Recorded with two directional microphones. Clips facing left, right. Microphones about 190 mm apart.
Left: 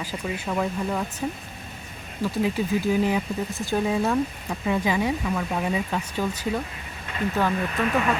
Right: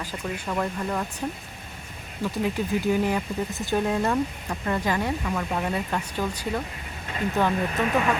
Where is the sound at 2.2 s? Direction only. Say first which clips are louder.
Left 2 dB; 5° left (ahead or behind).